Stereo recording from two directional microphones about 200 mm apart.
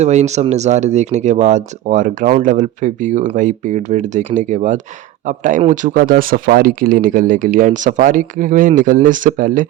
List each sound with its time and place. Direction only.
0.0 s speech: 35° right (ahead or behind)